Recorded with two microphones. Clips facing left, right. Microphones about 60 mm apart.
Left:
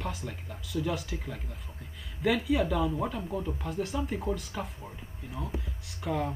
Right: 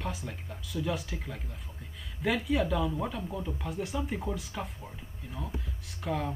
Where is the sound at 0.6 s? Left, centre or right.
Left.